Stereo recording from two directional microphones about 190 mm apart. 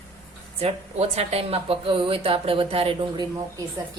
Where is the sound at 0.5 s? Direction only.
35° right (ahead or behind).